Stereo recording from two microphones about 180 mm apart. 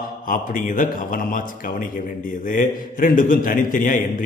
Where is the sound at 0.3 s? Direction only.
50° left (ahead or behind).